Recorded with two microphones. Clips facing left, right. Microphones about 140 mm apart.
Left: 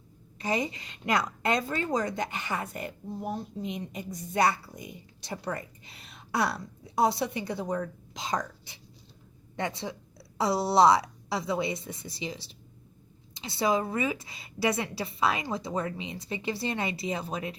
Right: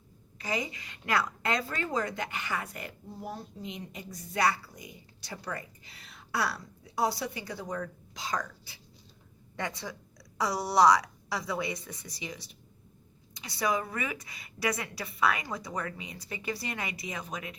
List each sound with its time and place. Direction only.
0.3 s a woman's voice: 25° left (ahead or behind)